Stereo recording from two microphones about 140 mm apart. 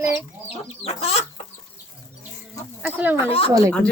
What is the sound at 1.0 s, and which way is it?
Chicken, 50° left (ahead or behind).